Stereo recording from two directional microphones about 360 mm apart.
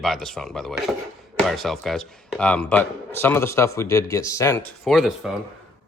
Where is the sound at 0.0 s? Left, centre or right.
Centre.